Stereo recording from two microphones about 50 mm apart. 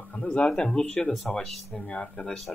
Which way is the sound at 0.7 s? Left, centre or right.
Centre.